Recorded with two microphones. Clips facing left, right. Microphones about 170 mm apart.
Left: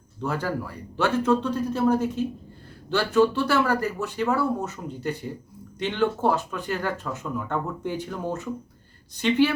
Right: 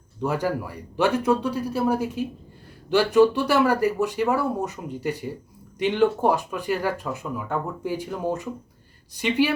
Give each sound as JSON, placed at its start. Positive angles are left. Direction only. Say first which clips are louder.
{"t": 0.2, "sound": "speech", "louder": "right 3 dB", "side_deg": -15}